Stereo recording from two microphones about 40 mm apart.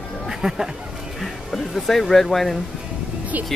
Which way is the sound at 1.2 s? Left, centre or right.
Centre.